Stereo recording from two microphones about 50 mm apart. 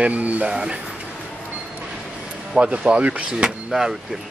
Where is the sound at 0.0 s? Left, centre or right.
Right.